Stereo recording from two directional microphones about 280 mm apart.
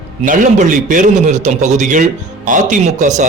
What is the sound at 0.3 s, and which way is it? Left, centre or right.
A man's voice, right.